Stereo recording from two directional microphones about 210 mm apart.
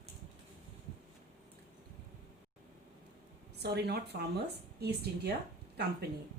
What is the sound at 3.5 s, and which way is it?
Speech, 50° right (ahead or behind).